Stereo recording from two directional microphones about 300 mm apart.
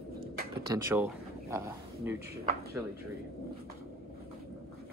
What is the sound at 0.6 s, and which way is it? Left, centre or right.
Speech, centre.